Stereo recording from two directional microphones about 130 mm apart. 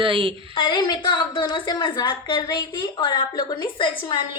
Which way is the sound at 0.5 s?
35° left (ahead or behind).